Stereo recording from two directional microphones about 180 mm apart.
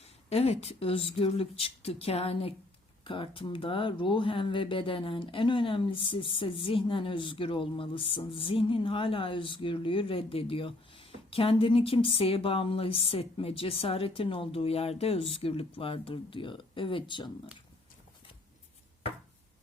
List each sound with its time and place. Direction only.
0.3 s speech: 35° left (ahead or behind)